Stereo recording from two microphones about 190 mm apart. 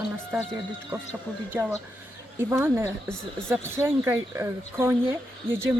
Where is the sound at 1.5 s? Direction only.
10° right (ahead or behind).